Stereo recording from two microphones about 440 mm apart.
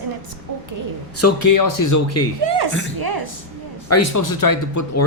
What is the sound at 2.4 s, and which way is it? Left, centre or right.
Speech, right.